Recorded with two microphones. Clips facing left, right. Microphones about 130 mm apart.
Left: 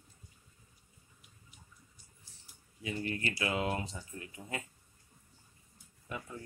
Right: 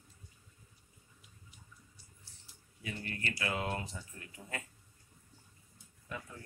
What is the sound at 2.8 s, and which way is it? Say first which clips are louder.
Speech: left 5 dB; 20° left (ahead or behind).